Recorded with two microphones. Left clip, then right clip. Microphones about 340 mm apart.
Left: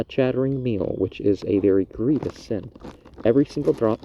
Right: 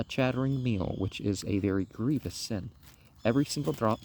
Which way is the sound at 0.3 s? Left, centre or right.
Right.